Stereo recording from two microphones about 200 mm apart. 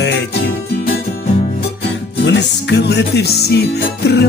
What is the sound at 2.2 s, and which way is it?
Music, 60° left (ahead or behind).